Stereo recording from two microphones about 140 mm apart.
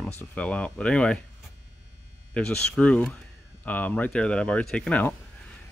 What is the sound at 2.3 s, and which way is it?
Speech, 5° left (ahead or behind).